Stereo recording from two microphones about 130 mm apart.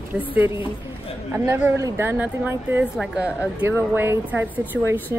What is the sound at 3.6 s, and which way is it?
A woman's voice, 15° right (ahead or behind).